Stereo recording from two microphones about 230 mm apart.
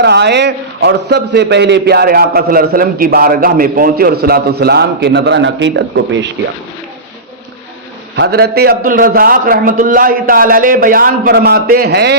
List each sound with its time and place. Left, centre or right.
0.0 s a man's voice: right
8.1 s a man's voice: right